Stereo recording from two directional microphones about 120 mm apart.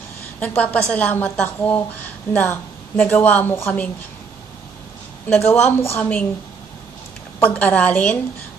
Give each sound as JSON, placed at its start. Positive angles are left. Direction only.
{"t": 0.4, "sound": "a woman's voice", "side_deg": 10}
{"t": 5.3, "sound": "a woman's voice", "side_deg": 15}
{"t": 7.3, "sound": "a woman's voice", "side_deg": 10}